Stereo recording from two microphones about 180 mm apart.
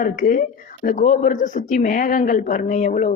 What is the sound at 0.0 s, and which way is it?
Speech, 50° left (ahead or behind).